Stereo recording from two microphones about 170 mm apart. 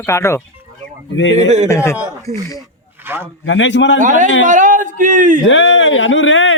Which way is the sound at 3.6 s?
90° left.